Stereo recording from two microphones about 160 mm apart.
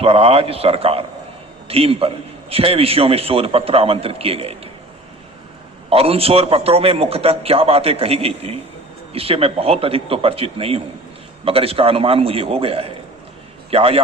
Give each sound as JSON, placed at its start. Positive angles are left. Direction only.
{"t": 0.0, "sound": "a man's voice", "side_deg": -40}
{"t": 5.9, "sound": "a man's voice", "side_deg": -35}